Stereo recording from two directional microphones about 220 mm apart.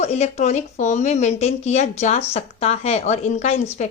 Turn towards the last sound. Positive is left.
turn(degrees=30)  # may be behind; listen again after turning